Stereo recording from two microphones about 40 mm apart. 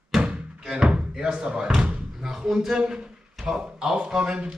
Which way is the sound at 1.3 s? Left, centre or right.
Right.